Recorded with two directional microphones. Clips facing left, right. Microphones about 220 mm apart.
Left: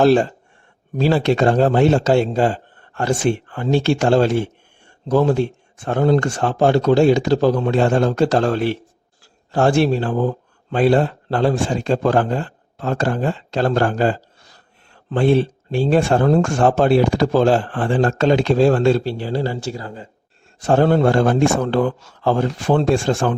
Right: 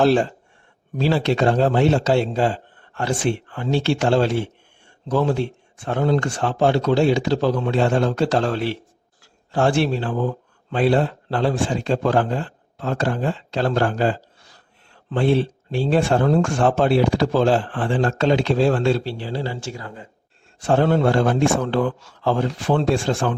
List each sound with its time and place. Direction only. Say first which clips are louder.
0.0 s a man's voice: left 3 dB; 40° left (ahead or behind)
20.6 s speech: left 3 dB; 40° left (ahead or behind)